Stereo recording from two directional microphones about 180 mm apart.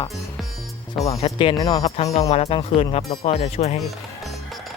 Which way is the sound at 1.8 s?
35° left (ahead or behind).